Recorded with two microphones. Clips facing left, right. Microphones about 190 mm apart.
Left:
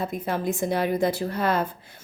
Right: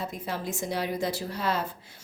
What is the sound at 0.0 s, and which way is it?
Speech, 55° left (ahead or behind).